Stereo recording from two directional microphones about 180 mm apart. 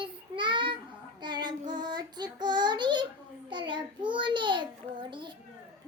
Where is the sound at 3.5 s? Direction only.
25° right (ahead or behind).